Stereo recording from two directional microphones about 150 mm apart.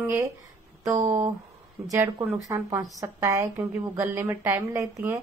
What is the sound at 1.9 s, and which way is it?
A woman's voice, 15° right (ahead or behind).